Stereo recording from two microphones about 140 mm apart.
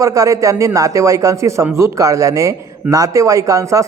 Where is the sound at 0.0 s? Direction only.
25° right (ahead or behind).